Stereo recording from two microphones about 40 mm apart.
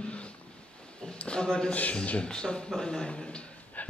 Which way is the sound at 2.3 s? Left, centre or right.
Left.